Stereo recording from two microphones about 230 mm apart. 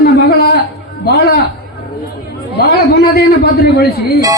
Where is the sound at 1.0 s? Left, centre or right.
Left.